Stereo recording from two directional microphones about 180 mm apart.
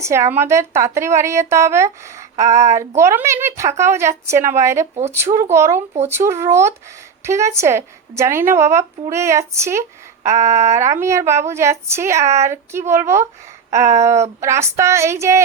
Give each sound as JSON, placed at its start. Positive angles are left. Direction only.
{"t": 0.0, "sound": "a woman's voice", "side_deg": -15}